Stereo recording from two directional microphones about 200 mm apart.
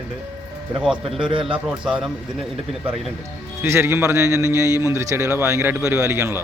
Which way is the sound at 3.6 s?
15° right (ahead or behind).